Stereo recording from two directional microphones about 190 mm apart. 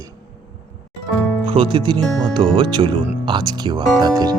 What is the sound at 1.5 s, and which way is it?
Speech, 30° right (ahead or behind).